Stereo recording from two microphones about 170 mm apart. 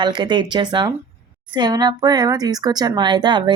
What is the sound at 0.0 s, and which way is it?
Speech, 25° right (ahead or behind).